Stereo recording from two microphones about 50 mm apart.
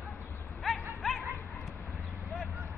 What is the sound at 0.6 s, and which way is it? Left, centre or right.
Bow-wow, centre.